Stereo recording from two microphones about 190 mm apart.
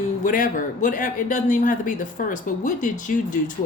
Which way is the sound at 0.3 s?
45° left (ahead or behind).